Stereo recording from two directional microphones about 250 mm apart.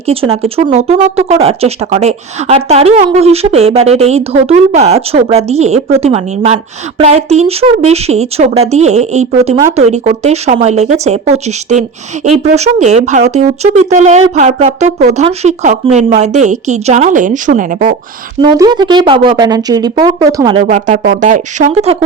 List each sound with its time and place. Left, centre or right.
0.0 s speech: right
18.4 s speech: centre
20.6 s speech: right